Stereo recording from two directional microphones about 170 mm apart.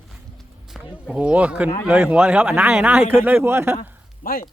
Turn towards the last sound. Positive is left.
turn(degrees=60)  # may be behind; listen again after turning